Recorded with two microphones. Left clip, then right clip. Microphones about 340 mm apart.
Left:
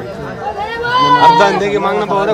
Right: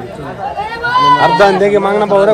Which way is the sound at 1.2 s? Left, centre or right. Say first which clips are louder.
Even; right.